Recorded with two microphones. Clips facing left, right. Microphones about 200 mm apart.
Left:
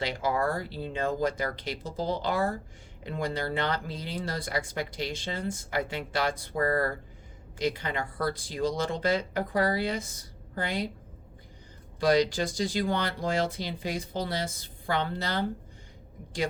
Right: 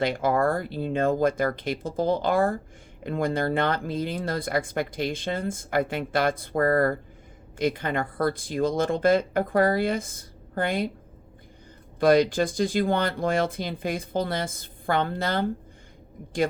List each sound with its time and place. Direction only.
0.0 s speech: 50° right (ahead or behind)
11.9 s speech: 55° right (ahead or behind)